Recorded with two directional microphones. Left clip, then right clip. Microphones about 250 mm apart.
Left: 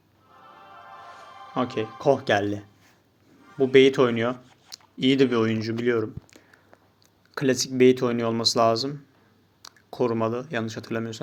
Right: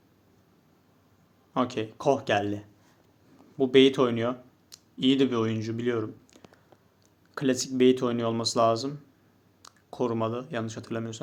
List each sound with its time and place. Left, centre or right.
1.5 s speech: centre